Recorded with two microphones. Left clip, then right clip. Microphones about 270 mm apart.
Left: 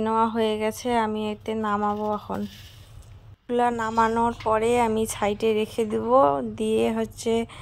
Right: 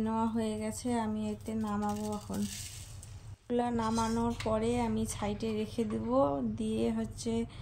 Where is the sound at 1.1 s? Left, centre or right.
Left.